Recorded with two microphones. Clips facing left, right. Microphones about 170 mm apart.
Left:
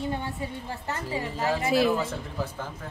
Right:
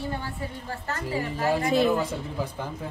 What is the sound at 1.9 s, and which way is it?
Speech, 15° right (ahead or behind).